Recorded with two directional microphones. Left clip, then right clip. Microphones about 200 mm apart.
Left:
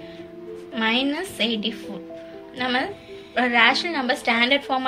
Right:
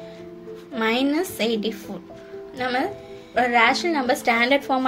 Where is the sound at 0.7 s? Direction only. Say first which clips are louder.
Right 1 dB; 40° right (ahead or behind).